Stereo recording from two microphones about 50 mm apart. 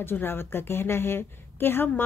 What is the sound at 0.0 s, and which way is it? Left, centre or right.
Speech, left.